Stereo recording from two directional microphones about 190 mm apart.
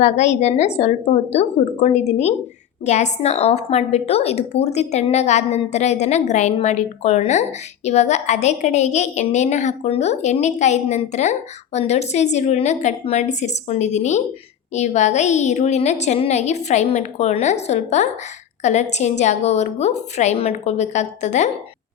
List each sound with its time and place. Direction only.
0.0 s a woman's voice: 35° left (ahead or behind)